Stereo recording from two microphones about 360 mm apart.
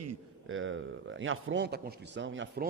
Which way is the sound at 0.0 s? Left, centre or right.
Right.